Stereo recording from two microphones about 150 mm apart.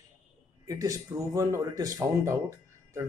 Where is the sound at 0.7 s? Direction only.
20° right (ahead or behind).